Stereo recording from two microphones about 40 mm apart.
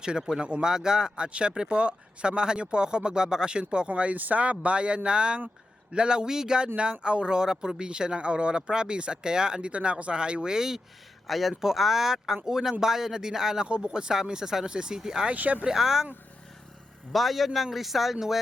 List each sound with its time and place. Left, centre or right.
0.0 s speech: centre
6.7 s speech: right
11.3 s speech: centre
13.7 s speech: right
15.4 s speech: right
15.6 s speech: centre
17.1 s a man's voice: centre